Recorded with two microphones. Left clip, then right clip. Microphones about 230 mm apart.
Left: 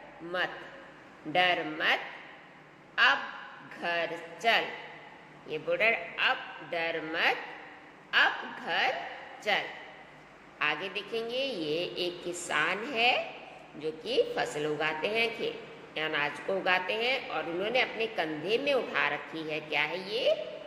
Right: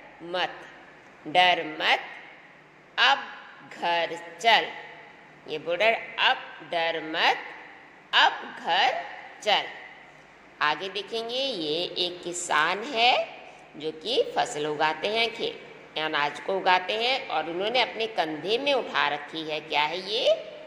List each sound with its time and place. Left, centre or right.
1.3 s a woman's voice: right
3.0 s a woman's voice: right